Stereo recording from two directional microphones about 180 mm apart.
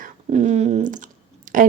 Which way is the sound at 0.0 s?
40° right (ahead or behind).